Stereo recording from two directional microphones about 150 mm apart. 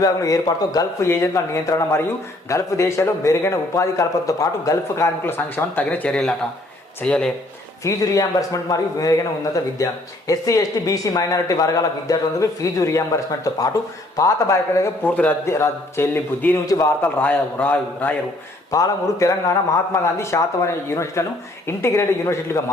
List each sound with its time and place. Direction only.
0.0 s a man's voice: 25° left (ahead or behind); by 7.3 s 5° left (ahead or behind)
7.9 s a man's voice: 20° left (ahead or behind)
18.7 s a man's voice: 20° left (ahead or behind)